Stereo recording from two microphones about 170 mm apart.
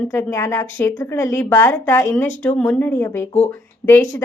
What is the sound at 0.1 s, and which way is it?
A woman's voice, 15° left (ahead or behind).